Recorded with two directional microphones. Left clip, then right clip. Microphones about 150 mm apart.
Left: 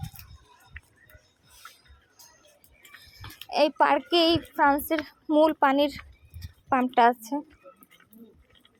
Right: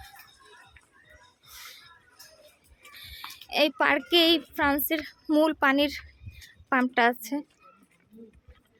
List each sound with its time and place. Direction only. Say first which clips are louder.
0.8 s music: left 9 dB; 90° left
3.5 s speech: left 2 dB; 15° right (ahead or behind)